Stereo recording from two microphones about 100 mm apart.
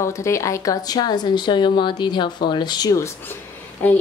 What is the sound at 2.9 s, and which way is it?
Speech, 30° left (ahead or behind).